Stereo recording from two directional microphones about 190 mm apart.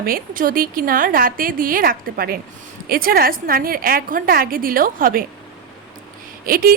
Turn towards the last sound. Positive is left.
turn(degrees=-50)  # may be behind; listen again after turning